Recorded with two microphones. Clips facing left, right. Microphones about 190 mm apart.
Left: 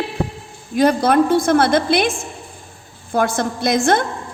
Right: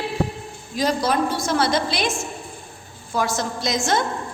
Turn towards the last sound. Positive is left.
turn(degrees=55)  # may be behind; listen again after turning